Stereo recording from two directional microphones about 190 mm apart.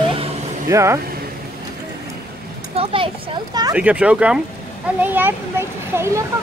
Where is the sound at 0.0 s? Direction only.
30° right (ahead or behind).